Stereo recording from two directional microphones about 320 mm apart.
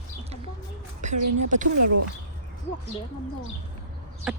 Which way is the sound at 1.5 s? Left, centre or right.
Right.